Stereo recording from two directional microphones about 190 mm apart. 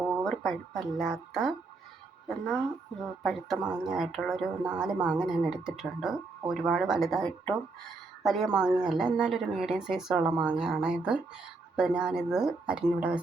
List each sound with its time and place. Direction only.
0.0 s a sound: 10° right (ahead or behind)
0.3 s speech: centre (ahead or behind)
3.0 s speech: centre (ahead or behind)